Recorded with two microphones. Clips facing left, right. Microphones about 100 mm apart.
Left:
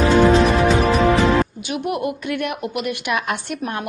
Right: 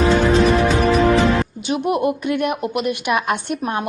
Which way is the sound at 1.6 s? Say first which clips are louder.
Right 4 dB; 25° right (ahead or behind).